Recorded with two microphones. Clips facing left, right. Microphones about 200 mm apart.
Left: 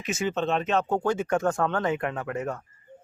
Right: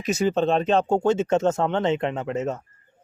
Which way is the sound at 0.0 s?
35° right (ahead or behind).